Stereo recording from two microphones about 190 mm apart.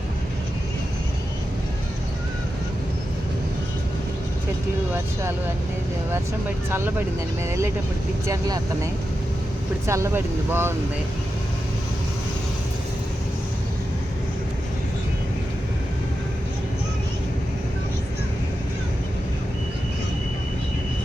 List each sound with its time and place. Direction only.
6.7 s speech: 10° right (ahead or behind)
8.3 s speech: 20° right (ahead or behind)